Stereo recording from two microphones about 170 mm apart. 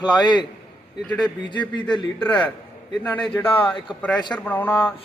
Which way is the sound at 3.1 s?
10° left (ahead or behind).